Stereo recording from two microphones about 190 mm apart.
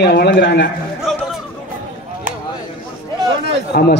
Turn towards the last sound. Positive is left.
turn(degrees=50)  # may be behind; listen again after turning